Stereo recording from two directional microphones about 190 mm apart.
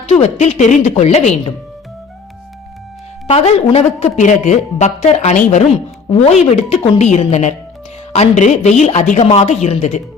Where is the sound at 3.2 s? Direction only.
35° left (ahead or behind).